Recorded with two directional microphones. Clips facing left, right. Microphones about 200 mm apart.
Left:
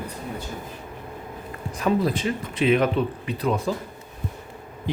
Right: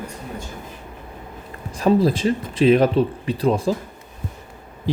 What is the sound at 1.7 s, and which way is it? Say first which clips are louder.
Speech: right 5 dB; 35° right (ahead or behind).